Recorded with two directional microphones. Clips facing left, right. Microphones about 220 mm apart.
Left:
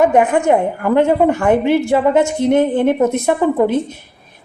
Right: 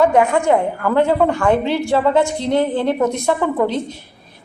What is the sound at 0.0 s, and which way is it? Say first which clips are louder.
A woman's voice: left 2 dB; 15° left (ahead or behind).